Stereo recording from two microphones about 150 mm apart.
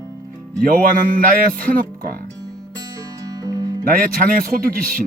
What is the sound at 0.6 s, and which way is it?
Speech, 65° right (ahead or behind).